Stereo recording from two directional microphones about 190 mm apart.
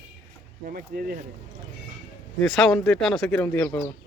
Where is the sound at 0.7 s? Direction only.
50° right (ahead or behind).